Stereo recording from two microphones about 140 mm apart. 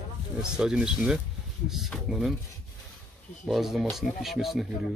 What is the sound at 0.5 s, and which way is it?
Speech, 5° right (ahead or behind).